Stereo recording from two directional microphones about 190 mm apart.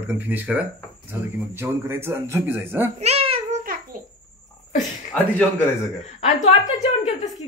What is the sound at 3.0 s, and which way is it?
Babbling, 30° right (ahead or behind).